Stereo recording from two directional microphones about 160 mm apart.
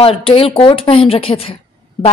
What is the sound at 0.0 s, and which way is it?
Speech, 35° left (ahead or behind).